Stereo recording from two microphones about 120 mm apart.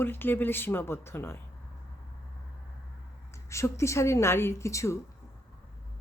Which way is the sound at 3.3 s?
25° left (ahead or behind).